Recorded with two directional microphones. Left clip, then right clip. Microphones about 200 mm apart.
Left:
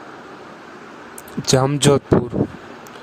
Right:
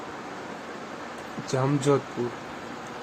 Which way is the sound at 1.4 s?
50° left (ahead or behind).